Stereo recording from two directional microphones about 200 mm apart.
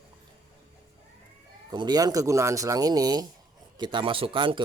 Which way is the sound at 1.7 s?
20° right (ahead or behind).